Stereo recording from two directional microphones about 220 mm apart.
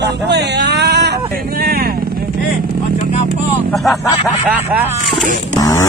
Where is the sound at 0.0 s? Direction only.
50° right (ahead or behind).